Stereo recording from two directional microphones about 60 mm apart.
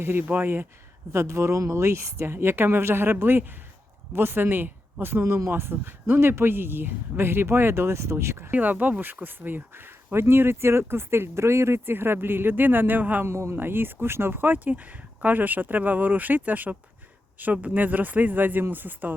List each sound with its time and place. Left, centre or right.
0.0 s speech: right
1.1 s speech: right
8.4 s speech: right
13.2 s speech: right
13.6 s speech: right